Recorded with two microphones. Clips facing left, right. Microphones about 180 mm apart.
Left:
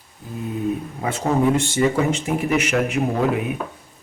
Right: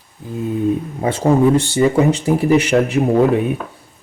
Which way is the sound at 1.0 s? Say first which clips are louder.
Right 6 dB; 30° right (ahead or behind).